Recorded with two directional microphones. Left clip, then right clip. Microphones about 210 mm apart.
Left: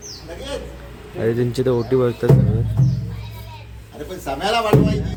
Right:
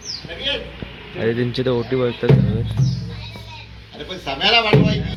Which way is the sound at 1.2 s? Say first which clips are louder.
Left 1 dB; 15° left (ahead or behind).